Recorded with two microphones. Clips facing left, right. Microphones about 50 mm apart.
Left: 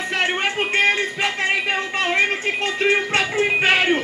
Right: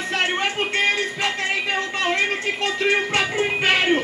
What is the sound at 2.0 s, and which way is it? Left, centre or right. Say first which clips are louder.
Music: left 3 dB; centre.